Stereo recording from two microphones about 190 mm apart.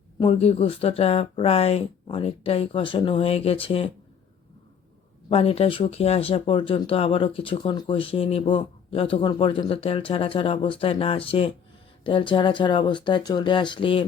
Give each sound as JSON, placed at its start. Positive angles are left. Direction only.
{"t": 0.2, "sound": "speech", "side_deg": 30}
{"t": 5.3, "sound": "speech", "side_deg": 30}